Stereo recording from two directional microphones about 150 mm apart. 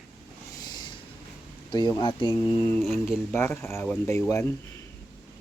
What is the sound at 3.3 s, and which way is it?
Speech, 15° left (ahead or behind).